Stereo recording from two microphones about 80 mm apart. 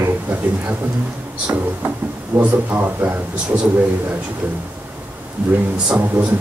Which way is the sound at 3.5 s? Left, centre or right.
Centre.